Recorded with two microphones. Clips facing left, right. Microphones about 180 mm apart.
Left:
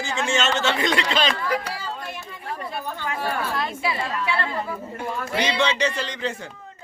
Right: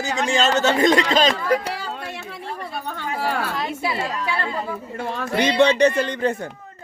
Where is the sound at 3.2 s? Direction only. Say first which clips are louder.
Right 3 dB; 80° right.